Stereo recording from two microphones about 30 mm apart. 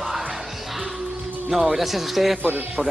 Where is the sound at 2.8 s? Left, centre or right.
Right.